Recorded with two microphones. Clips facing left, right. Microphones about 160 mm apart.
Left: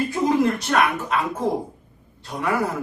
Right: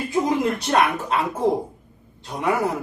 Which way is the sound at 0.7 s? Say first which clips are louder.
Right 3 dB; 25° right (ahead or behind).